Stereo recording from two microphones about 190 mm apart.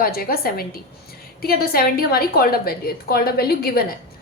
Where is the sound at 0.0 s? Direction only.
50° left (ahead or behind).